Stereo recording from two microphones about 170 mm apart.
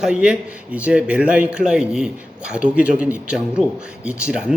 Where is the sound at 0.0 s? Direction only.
5° right (ahead or behind).